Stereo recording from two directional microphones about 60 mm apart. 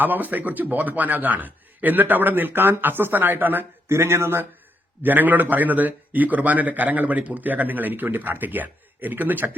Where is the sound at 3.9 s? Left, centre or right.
Right.